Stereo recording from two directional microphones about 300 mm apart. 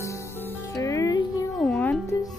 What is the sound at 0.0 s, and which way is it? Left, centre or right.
Music, centre.